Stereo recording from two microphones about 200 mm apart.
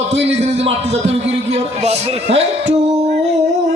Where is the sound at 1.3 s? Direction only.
30° right (ahead or behind).